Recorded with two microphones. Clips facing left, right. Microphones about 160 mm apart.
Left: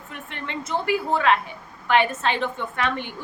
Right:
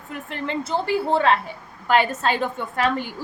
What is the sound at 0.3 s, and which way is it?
A woman's voice, 35° right (ahead or behind).